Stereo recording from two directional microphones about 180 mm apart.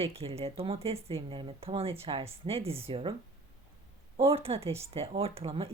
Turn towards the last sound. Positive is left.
turn(degrees=-35)  # may be behind; listen again after turning